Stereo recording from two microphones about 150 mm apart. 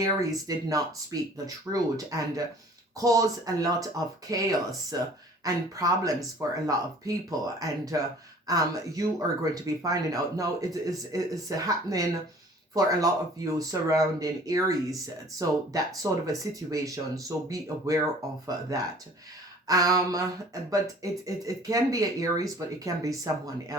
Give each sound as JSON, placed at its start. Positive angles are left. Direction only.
{"t": 0.0, "sound": "speech", "side_deg": -25}
{"t": 19.6, "sound": "speech", "side_deg": -25}